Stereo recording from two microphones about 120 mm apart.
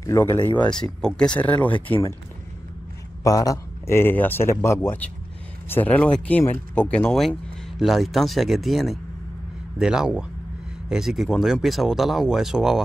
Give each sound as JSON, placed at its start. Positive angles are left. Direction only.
{"t": 0.0, "sound": "speech", "side_deg": 25}
{"t": 0.5, "sound": "speech", "side_deg": 10}
{"t": 3.3, "sound": "speech", "side_deg": 30}